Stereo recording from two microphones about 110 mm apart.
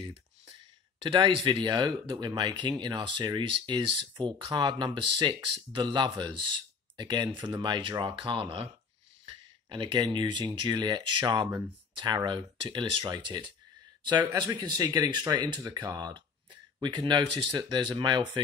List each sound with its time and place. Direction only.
1.0 s speech: 50° right (ahead or behind)